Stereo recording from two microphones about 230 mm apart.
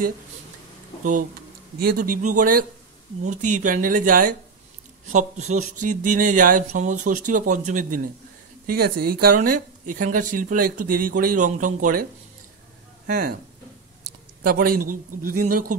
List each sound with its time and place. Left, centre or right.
1.8 s speech: right
14.4 s speech: right